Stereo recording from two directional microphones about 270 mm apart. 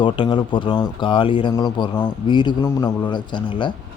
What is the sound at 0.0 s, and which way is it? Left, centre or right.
Speech, centre.